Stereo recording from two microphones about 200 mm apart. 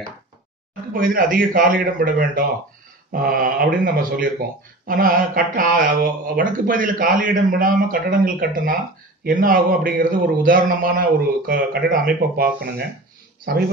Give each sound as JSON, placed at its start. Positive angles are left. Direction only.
{"t": 0.9, "sound": "speech", "side_deg": -45}